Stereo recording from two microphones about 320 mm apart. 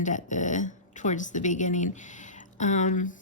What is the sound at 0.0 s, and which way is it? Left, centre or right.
Speech, left.